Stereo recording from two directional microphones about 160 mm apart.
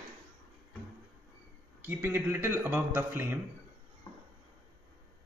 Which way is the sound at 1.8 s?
15° right (ahead or behind).